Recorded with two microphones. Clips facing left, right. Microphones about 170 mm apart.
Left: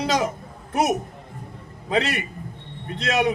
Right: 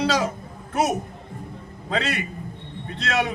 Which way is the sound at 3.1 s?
15° left (ahead or behind).